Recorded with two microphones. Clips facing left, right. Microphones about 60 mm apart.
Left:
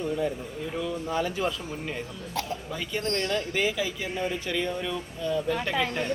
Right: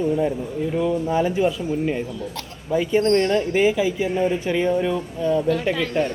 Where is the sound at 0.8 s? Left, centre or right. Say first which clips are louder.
Right 8 dB; right.